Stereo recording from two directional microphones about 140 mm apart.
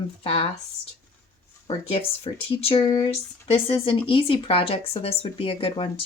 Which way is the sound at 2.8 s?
30° left (ahead or behind).